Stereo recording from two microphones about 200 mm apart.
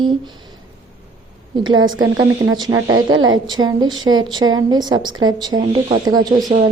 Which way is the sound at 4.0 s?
85° right.